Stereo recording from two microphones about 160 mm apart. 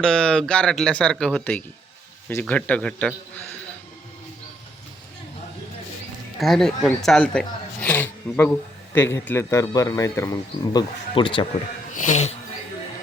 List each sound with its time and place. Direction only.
0.0 s speech: 5° left (ahead or behind)
6.4 s speech: centre (ahead or behind); by 10.8 s 20° left (ahead or behind)
11.1 s speech: 35° left (ahead or behind)
11.9 s speech: 50° left (ahead or behind)